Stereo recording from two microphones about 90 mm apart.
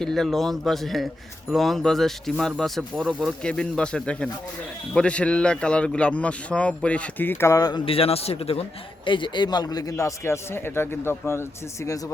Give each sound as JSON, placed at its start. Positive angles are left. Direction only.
{"t": 0.0, "sound": "a man's voice", "side_deg": 5}
{"t": 7.5, "sound": "speech", "side_deg": 45}
{"t": 7.9, "sound": "speech", "side_deg": 90}
{"t": 9.0, "sound": "speech", "side_deg": 65}